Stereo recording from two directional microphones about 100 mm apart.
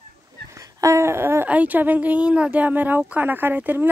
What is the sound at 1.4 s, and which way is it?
Speech, 15° right (ahead or behind).